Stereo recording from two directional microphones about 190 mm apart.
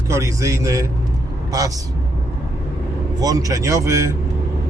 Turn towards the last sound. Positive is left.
turn(degrees=-15)  # may be behind; listen again after turning